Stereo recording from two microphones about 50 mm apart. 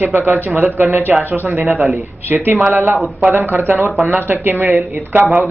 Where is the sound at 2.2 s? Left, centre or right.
Right.